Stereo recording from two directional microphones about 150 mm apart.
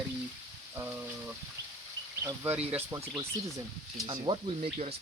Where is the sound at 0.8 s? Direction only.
10° right (ahead or behind).